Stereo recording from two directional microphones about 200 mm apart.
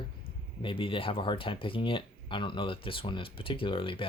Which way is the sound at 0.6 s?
25° left (ahead or behind).